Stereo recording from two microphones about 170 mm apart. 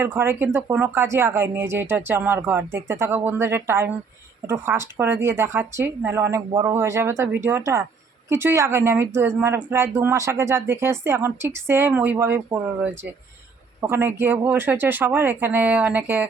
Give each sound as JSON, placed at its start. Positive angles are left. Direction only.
{"t": 0.0, "sound": "speech", "side_deg": -15}